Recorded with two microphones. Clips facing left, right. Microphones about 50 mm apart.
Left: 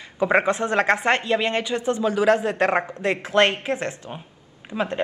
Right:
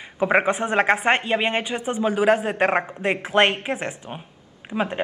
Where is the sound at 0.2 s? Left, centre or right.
Centre.